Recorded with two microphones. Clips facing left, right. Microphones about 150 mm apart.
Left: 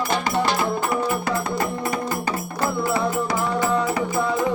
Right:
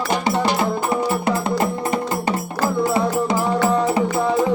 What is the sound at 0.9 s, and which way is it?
Music, 30° right (ahead or behind).